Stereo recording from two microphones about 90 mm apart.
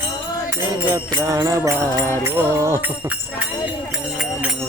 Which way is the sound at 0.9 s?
55° right (ahead or behind).